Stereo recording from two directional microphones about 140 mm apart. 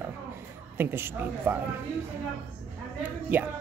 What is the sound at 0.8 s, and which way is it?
Speech, 15° right (ahead or behind).